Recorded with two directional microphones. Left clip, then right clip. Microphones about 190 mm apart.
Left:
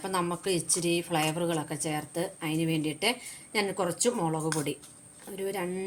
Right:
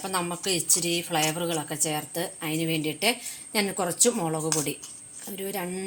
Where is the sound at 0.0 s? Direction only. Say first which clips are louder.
Right 1 dB; 10° right (ahead or behind).